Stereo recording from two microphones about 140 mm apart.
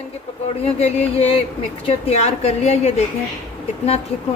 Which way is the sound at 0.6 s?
50° left (ahead or behind).